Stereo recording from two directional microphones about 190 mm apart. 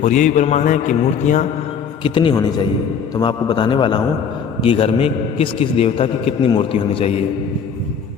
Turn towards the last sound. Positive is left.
turn(degrees=30)  # may be behind; listen again after turning